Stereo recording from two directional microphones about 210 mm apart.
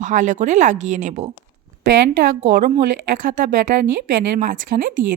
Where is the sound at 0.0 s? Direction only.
35° right (ahead or behind).